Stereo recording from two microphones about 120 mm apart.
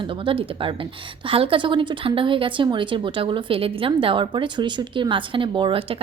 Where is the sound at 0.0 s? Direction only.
45° right (ahead or behind).